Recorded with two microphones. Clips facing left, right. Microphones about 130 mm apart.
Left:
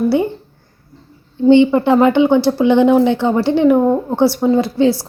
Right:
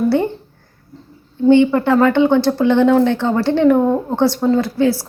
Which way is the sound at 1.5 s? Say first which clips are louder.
Left 2 dB; 20° left (ahead or behind).